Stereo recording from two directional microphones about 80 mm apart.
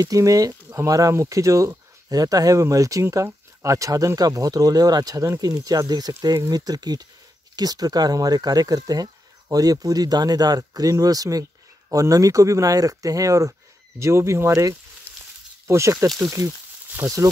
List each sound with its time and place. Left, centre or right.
0.0 s speech: right
15.1 s a sound: left
15.6 s speech: right
17.0 s speech: right